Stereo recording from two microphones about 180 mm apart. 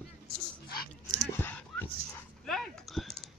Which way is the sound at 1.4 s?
10° left (ahead or behind).